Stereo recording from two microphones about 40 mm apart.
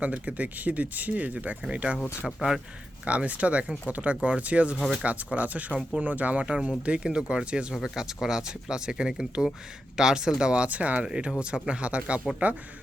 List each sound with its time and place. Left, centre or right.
0.0 s speech: right
2.2 s speech: centre
3.0 s speech: right
6.4 s speech: right
7.7 s speech: centre
10.5 s speech: right
11.3 s speech: right